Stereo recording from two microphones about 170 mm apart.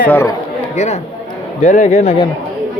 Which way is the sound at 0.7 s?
40° left (ahead or behind).